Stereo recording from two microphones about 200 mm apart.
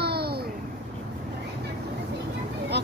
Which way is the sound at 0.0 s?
55° right (ahead or behind).